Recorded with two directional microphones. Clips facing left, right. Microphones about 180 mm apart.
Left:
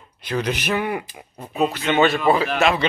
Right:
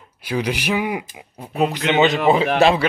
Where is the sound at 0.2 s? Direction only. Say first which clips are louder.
Right 1 dB; 10° right (ahead or behind).